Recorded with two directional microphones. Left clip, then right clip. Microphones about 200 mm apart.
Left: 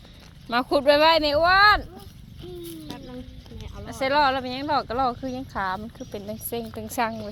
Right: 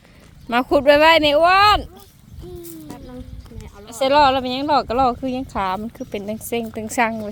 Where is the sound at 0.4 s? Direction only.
35° right (ahead or behind).